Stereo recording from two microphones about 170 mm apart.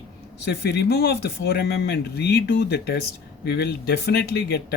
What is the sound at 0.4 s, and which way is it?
Speech, 75° left (ahead or behind).